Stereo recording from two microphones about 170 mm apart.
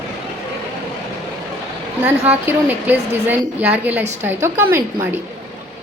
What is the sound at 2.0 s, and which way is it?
A woman's voice, 10° right (ahead or behind).